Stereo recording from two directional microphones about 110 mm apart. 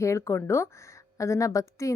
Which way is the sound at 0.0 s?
25° left (ahead or behind).